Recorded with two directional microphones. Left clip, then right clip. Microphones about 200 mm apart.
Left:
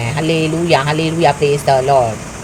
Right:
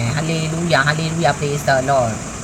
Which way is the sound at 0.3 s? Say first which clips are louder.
Left 7 dB; 15° left (ahead or behind).